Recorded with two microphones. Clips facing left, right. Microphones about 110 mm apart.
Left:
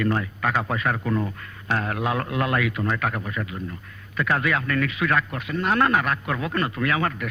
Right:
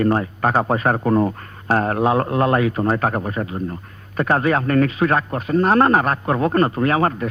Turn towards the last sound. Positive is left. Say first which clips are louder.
# right 6 dB
turn(degrees=-35)  # may be behind; listen again after turning